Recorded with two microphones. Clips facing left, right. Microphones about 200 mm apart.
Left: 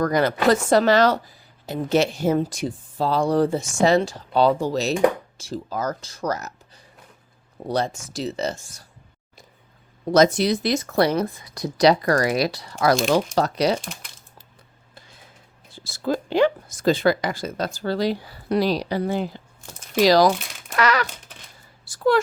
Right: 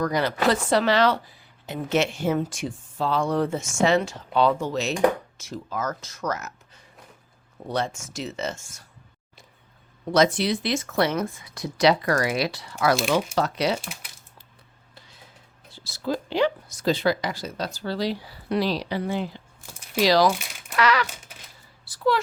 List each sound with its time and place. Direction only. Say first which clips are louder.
0.0 s a woman's voice: left 4 dB; 50° left (ahead or behind)
7.7 s a woman's voice: left 3 dB; 35° left (ahead or behind)
10.1 s a woman's voice: left 4 dB; 40° left (ahead or behind)
15.7 s a woman's voice: left 3 dB; 50° left (ahead or behind)
20.4 s crumpling: left 2 dB; 5° right (ahead or behind)
20.7 s a sound: left 1 dB; 45° left (ahead or behind)